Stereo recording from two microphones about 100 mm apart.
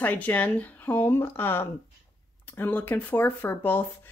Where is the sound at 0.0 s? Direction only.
15° left (ahead or behind).